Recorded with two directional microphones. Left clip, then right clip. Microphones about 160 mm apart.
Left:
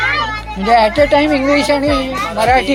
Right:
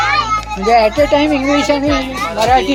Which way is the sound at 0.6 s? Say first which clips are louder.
Left 1 dB; 10° left (ahead or behind).